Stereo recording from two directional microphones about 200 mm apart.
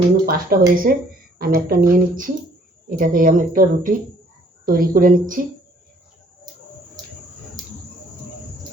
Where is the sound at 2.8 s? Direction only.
45° right (ahead or behind).